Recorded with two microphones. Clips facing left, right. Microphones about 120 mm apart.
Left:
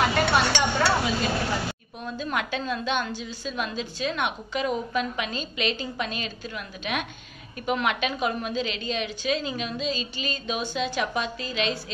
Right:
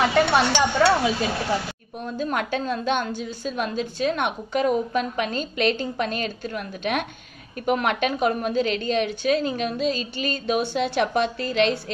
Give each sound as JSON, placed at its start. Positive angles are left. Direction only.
{"t": 0.0, "sound": "speech", "side_deg": -25}
{"t": 2.3, "sound": "a woman's voice", "side_deg": -45}